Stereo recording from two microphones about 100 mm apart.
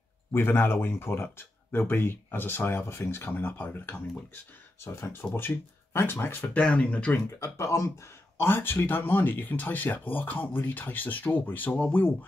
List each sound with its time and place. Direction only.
0.3 s speech: 25° left (ahead or behind)
4.8 s speech: 30° left (ahead or behind)
5.2 s speech: 20° left (ahead or behind)
7.2 s speech: 30° left (ahead or behind)